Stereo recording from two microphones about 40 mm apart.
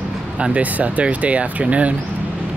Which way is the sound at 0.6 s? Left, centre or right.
Right.